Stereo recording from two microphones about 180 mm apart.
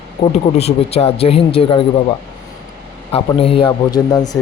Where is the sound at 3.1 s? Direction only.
30° left (ahead or behind).